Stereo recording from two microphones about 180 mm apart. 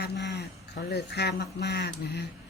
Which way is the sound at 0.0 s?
70° left (ahead or behind).